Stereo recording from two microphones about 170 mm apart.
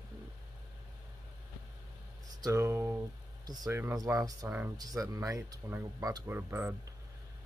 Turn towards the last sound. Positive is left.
turn(degrees=-15)  # may be behind; listen again after turning